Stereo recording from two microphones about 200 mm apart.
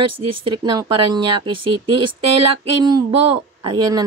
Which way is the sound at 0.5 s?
20° right (ahead or behind).